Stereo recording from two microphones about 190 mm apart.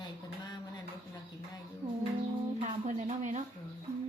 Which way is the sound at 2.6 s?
40° right (ahead or behind).